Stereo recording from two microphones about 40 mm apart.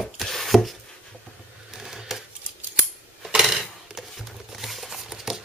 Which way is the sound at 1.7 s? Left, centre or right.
Centre.